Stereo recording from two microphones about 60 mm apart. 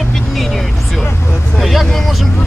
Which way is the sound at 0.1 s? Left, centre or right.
Centre.